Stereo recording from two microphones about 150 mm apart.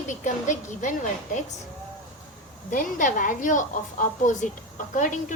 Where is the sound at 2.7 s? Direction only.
60° left (ahead or behind).